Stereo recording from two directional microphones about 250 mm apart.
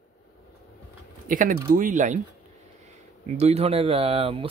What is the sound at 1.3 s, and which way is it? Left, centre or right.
Speech, right.